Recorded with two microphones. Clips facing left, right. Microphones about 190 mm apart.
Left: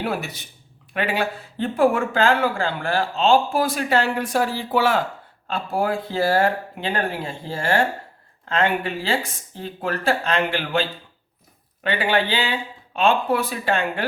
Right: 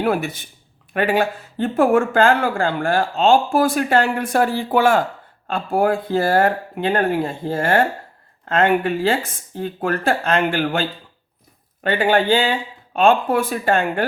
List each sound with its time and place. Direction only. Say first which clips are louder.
0.0 s speech: right 6 dB; 50° right (ahead or behind)